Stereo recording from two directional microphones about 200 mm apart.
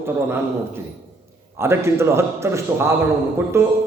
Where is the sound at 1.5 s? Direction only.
10° right (ahead or behind).